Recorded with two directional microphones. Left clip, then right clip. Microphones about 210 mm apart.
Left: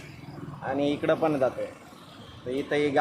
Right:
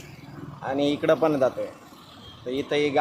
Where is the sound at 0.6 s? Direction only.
35° right (ahead or behind).